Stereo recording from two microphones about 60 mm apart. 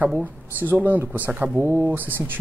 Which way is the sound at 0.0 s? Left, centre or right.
Right.